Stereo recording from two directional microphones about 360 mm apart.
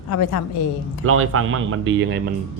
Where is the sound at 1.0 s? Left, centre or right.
Right.